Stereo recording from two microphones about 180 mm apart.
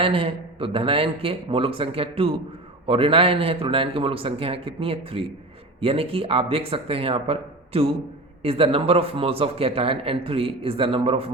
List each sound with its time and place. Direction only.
0.0 s speech: 30° right (ahead or behind)